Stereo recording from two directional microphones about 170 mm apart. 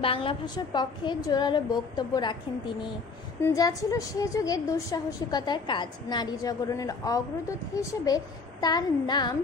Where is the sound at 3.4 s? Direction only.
20° left (ahead or behind).